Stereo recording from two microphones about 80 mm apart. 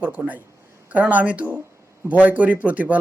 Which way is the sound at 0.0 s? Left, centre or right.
Centre.